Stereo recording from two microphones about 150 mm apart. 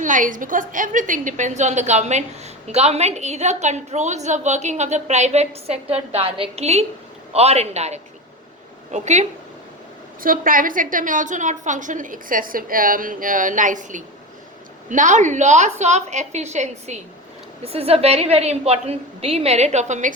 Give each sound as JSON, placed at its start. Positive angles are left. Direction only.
{"t": 0.0, "sound": "a woman's voice", "side_deg": -60}
{"t": 10.2, "sound": "a woman's voice", "side_deg": -70}